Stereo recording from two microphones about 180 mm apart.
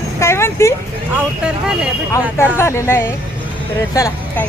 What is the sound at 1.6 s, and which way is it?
Speech, 5° right (ahead or behind).